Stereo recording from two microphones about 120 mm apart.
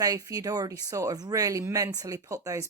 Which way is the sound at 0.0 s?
30° right (ahead or behind).